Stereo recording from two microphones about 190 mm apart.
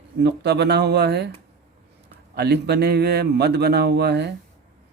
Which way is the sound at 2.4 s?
60° right (ahead or behind).